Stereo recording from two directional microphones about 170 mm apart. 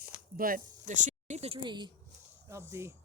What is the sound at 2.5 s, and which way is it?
Speech, 15° right (ahead or behind).